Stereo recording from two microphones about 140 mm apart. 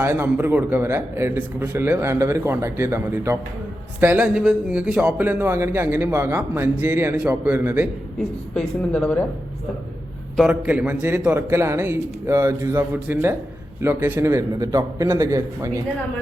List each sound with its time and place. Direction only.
0.0 s a man's voice: 15° right (ahead or behind)
8.5 s a woman's voice: 5° left (ahead or behind)
10.5 s a man's voice: 10° right (ahead or behind)